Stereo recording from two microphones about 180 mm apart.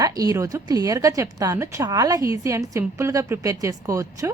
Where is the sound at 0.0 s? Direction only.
20° right (ahead or behind).